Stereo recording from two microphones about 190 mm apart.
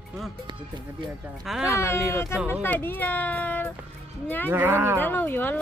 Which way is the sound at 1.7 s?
15° left (ahead or behind).